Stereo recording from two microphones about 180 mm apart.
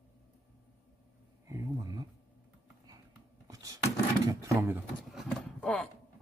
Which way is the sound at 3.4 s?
20° right (ahead or behind).